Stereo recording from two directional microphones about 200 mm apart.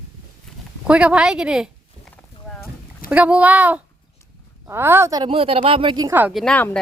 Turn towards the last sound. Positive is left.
turn(degrees=5)  # may be behind; listen again after turning